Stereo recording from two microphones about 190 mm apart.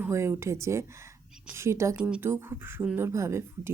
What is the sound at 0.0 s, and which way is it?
Speech, 15° right (ahead or behind).